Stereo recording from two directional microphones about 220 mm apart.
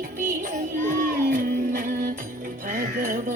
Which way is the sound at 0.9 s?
40° right (ahead or behind).